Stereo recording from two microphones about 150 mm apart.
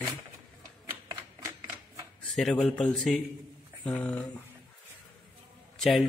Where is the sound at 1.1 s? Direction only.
20° right (ahead or behind).